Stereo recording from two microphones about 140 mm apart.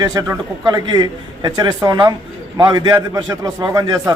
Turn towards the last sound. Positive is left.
turn(degrees=-25)  # may be behind; listen again after turning